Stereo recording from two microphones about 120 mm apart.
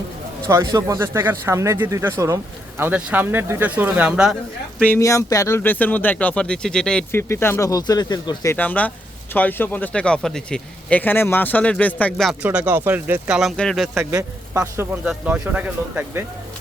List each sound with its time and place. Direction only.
0.4 s speech: 25° right (ahead or behind); by 4.4 s 5° right (ahead or behind)
4.9 s speech: 25° left (ahead or behind); by 7.0 s 5° left (ahead or behind)
7.1 s speech: 20° left (ahead or behind)
7.7 s speech: 35° left (ahead or behind)
8.5 s speech: 15° left (ahead or behind)
12.1 s a man's voice: 5° left (ahead or behind)
12.4 s a man's voice: 15° right (ahead or behind); by 13.9 s centre (ahead or behind)
13.9 s a man's voice: 25° right (ahead or behind)
15.0 s speech: 10° right (ahead or behind)